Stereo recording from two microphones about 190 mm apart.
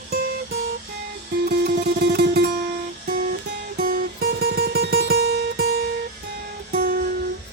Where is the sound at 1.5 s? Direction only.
55° right (ahead or behind).